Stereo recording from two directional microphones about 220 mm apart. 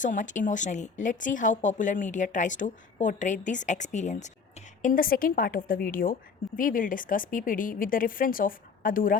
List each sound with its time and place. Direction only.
0.0 s speech: 35° left (ahead or behind)